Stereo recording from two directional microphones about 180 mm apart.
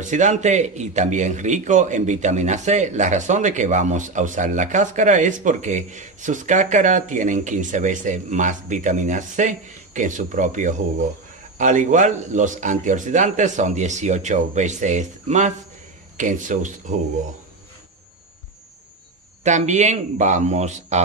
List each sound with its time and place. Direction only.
0.0 s a man's voice: 40° right (ahead or behind)
19.4 s a man's voice: 40° right (ahead or behind)